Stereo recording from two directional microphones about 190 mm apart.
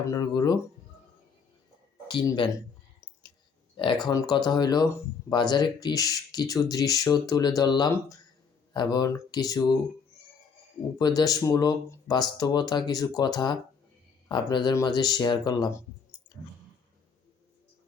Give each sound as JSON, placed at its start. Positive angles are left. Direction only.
{"t": 0.0, "sound": "speech", "side_deg": 20}
{"t": 2.0, "sound": "speech", "side_deg": 25}
{"t": 3.8, "sound": "speech", "side_deg": 25}
{"t": 10.9, "sound": "speech", "side_deg": 20}